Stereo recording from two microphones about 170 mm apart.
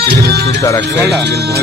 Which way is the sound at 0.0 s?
70° right (ahead or behind).